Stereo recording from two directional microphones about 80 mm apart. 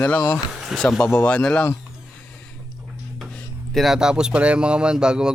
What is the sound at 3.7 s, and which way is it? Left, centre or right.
Speech, centre.